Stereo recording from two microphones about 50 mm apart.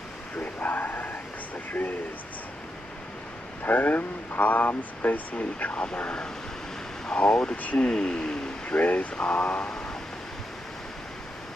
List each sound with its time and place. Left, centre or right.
0.4 s a sound: left
1.7 s speech: left
3.6 s speech: left; by 8.7 s centre
8.7 s speech: left